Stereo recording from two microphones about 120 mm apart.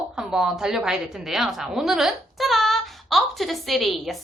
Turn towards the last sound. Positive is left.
turn(degrees=0)  # may be behind; listen again after turning